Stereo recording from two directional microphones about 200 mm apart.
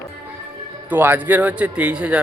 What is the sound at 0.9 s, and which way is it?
Speech, 10° right (ahead or behind).